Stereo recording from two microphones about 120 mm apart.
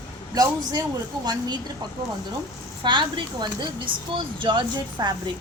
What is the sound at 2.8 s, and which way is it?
Speech, 40° right (ahead or behind).